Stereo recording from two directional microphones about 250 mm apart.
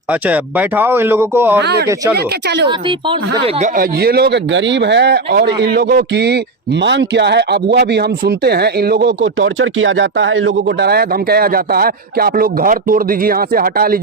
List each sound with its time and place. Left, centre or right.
0.1 s speech: centre
2.6 s speech: right
3.8 s speech: right